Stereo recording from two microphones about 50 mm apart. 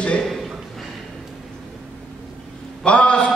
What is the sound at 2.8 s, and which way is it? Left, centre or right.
Speech, left.